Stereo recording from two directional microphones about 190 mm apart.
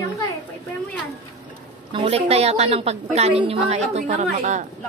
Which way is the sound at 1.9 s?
30° right (ahead or behind).